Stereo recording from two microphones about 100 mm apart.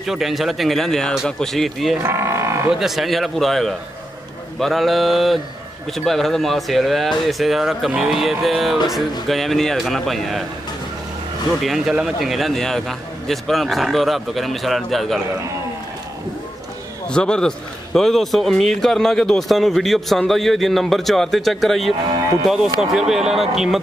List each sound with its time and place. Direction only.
0.0 s a man's voice: 5° right (ahead or behind)
2.0 s livestock: 25° right (ahead or behind)
2.7 s a man's voice: 5° right (ahead or behind)
11.6 s a man's voice: 5° right (ahead or behind)
17.1 s a man's voice: 10° left (ahead or behind)